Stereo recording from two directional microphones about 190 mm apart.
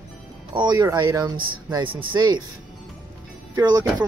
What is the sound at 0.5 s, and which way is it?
Speech, 20° right (ahead or behind).